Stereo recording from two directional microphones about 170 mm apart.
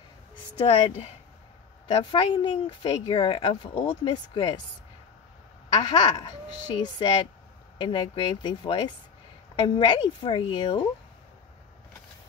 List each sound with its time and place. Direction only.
0.6 s speech: 35° left (ahead or behind)
5.7 s speech: 25° left (ahead or behind)